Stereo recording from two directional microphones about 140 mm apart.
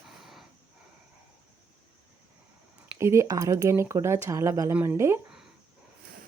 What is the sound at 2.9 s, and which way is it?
Speech, 20° right (ahead or behind).